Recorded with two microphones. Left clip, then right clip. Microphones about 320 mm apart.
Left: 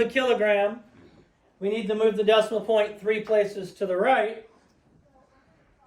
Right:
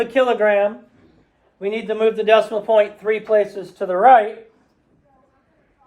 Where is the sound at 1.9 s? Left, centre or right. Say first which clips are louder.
Right 6 dB; right.